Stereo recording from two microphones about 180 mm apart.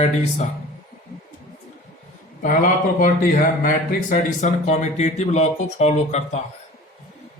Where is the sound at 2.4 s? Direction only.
50° left (ahead or behind).